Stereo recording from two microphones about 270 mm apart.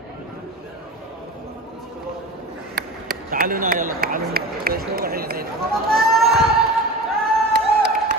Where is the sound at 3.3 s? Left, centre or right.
Right.